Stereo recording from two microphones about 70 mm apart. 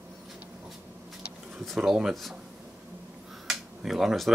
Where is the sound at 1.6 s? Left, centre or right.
Centre.